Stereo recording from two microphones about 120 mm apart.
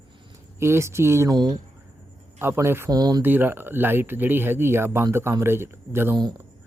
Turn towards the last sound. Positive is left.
turn(degrees=-20)  # may be behind; listen again after turning